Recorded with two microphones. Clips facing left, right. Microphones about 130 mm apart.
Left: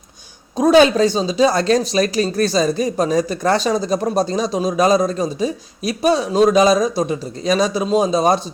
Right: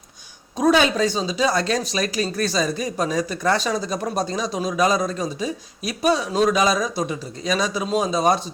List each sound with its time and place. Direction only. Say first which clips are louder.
0.6 s a man's voice: left 6 dB; 35° left (ahead or behind)